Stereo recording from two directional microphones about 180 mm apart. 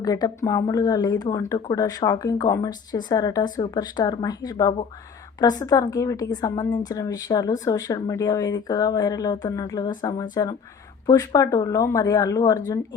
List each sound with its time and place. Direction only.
0.0 s speech: 20° left (ahead or behind)